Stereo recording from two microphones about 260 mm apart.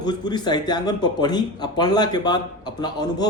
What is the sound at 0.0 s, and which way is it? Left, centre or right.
Speech, centre.